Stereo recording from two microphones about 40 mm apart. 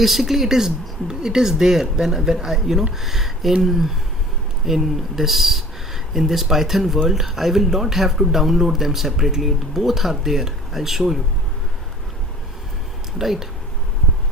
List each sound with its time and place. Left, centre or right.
0.0 s speech: centre
13.1 s speech: centre